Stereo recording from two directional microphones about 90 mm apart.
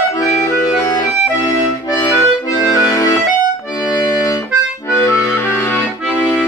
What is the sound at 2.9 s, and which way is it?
Music, 40° left (ahead or behind).